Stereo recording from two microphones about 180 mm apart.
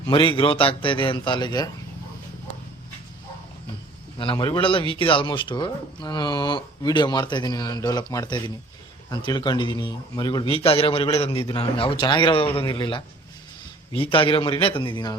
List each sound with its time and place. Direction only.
0.1 s speech: 30° left (ahead or behind)
4.2 s speech: 25° left (ahead or behind)